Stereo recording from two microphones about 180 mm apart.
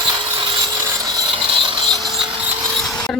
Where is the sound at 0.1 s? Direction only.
25° right (ahead or behind).